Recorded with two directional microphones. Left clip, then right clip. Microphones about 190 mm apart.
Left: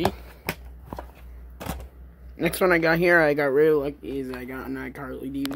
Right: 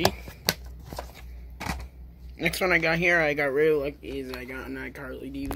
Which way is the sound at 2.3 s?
20° left (ahead or behind).